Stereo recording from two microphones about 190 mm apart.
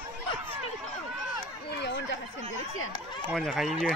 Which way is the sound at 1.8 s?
65° left (ahead or behind).